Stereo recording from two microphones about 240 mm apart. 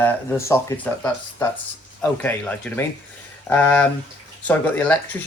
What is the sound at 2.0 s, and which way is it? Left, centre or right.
Speech, centre.